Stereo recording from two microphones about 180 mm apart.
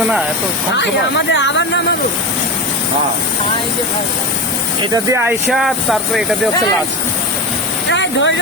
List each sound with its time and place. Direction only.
0.7 s speech: 80° left
4.8 s speech: 15° right (ahead or behind); by 6.2 s centre (ahead or behind)
7.9 s speech: 90° left